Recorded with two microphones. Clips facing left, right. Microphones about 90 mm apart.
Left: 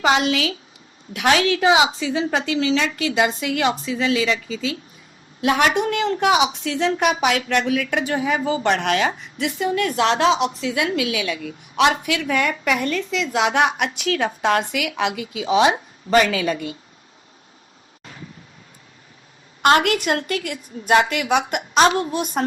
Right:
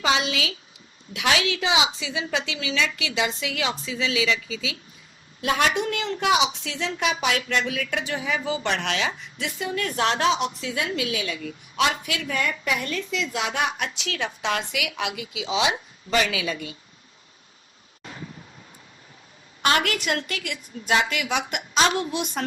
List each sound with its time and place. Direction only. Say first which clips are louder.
0.0 s a woman's voice: left 6 dB; 55° left (ahead or behind)
5.4 s a woman's voice: left 5 dB; 55° left (ahead or behind)
9.9 s speech: left 3 dB; 30° left (ahead or behind)
10.7 s a woman's voice: left 5 dB; 50° left (ahead or behind)
13.3 s a woman's voice: left 9 dB; 65° left (ahead or behind); by 16.7 s 45° left (ahead or behind)
19.6 s a woman's voice: left 6 dB; 40° left (ahead or behind)